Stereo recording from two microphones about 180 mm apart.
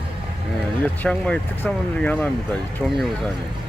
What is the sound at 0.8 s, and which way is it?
Speech, 5° left (ahead or behind).